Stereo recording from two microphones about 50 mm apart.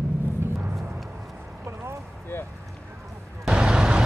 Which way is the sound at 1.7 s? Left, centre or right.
Right.